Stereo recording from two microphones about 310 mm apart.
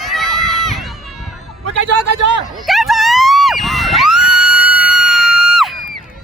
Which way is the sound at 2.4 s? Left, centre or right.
Centre.